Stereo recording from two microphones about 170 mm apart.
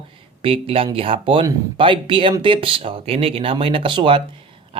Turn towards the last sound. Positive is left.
turn(degrees=-30)  # may be behind; listen again after turning